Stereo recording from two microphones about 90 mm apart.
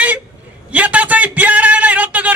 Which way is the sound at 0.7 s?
15° right (ahead or behind).